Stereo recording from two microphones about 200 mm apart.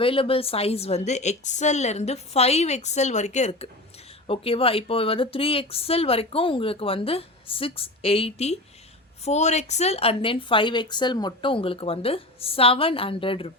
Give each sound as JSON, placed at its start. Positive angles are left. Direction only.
{"t": 0.0, "sound": "a woman's voice", "side_deg": 25}